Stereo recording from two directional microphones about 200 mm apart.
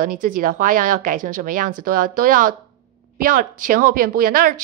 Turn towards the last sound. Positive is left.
turn(degrees=-45)  # may be behind; listen again after turning